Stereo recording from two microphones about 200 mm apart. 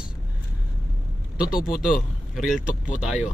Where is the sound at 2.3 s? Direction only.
Centre (ahead or behind).